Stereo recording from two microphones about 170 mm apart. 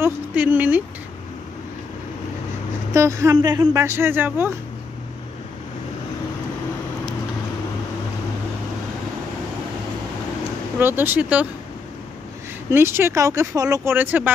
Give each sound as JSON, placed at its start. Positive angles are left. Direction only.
{"t": 0.0, "sound": "speech", "side_deg": -10}
{"t": 2.9, "sound": "speech", "side_deg": -15}
{"t": 10.8, "sound": "speech", "side_deg": -10}
{"t": 12.7, "sound": "speech", "side_deg": -15}